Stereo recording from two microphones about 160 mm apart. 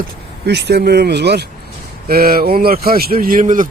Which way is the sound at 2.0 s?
70° right (ahead or behind).